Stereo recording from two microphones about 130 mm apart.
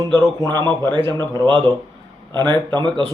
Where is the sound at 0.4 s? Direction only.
30° right (ahead or behind).